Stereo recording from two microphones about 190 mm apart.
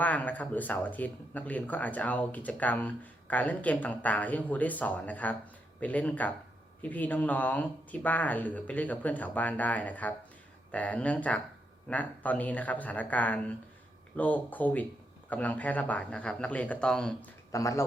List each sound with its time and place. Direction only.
0.0 s speech: 10° left (ahead or behind)
17.5 s speech: 15° left (ahead or behind)